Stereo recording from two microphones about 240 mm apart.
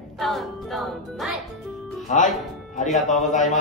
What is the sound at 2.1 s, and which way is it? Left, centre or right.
Speech, left.